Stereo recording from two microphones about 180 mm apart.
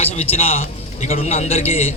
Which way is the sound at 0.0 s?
35° left (ahead or behind).